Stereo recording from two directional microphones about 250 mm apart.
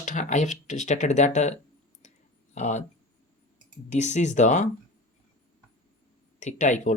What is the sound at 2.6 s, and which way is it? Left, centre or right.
Speech, left.